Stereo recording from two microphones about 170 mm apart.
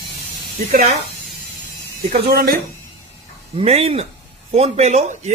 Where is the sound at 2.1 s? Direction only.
65° right (ahead or behind).